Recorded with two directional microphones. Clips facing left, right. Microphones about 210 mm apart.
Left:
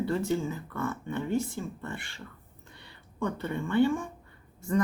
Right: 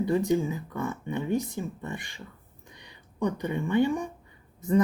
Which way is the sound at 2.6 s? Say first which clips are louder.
Right 1 dB; 15° right (ahead or behind).